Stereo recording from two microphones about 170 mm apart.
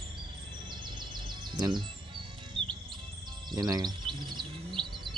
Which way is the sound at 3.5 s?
20° right (ahead or behind).